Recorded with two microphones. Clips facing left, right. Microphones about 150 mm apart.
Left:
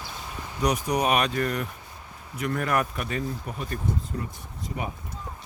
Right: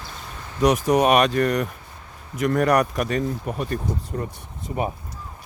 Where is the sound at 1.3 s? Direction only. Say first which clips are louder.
Right 6 dB; 45° right (ahead or behind).